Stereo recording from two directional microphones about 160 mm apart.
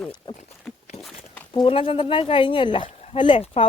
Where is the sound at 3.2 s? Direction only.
35° left (ahead or behind).